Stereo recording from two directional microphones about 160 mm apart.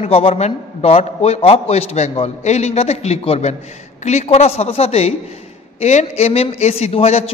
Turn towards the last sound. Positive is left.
turn(degrees=40)  # may be behind; listen again after turning